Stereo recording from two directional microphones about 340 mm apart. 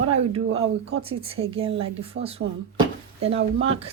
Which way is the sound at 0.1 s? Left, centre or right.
Centre.